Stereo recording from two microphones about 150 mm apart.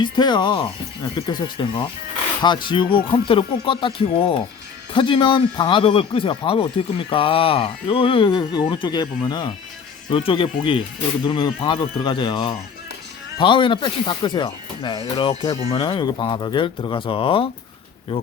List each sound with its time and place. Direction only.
0.0 s speech: 30° left (ahead or behind)